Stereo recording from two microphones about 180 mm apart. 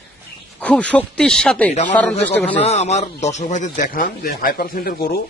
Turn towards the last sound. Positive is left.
turn(degrees=55)  # may be behind; listen again after turning